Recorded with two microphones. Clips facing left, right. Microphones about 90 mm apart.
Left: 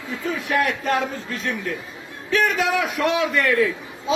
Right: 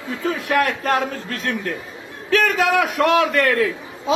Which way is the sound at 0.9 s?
45° right (ahead or behind).